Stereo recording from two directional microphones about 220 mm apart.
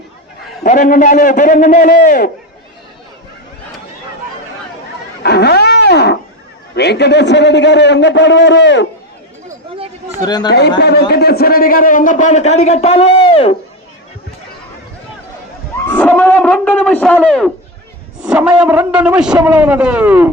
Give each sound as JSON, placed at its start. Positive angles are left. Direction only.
{"t": 0.6, "sound": "a man's voice", "side_deg": 35}
{"t": 5.2, "sound": "wild animals", "side_deg": 50}
{"t": 6.7, "sound": "a man's voice", "side_deg": 50}
{"t": 10.2, "sound": "speech", "side_deg": 20}
{"t": 10.8, "sound": "a man's voice", "side_deg": 45}
{"t": 15.9, "sound": "a man's voice", "side_deg": 10}